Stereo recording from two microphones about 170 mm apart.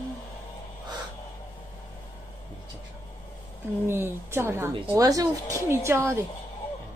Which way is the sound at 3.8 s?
15° right (ahead or behind).